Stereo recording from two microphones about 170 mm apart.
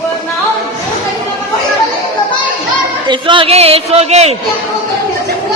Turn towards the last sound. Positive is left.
turn(degrees=-40)  # may be behind; listen again after turning